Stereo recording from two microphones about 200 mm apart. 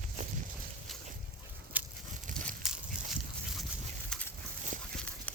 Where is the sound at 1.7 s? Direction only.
10° right (ahead or behind).